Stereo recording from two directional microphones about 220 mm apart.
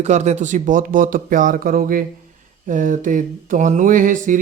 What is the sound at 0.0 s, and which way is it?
Speech, 30° right (ahead or behind).